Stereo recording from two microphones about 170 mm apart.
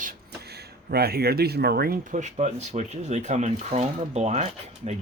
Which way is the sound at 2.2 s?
45° right (ahead or behind).